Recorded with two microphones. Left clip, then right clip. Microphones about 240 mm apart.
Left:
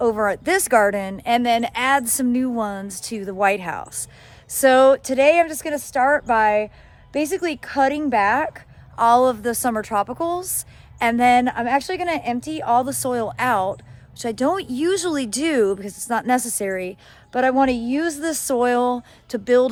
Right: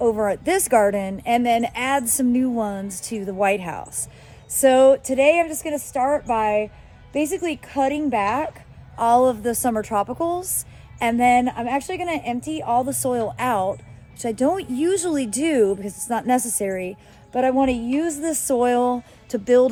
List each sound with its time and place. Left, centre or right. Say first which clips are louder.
0.0 s speech: left 1 dB; centre
5.5 s a woman's voice: left 1 dB; left
6.0 s speech: left 4 dB; centre
11.8 s a woman's voice: left 3 dB; left
12.1 s speech: left 1 dB; centre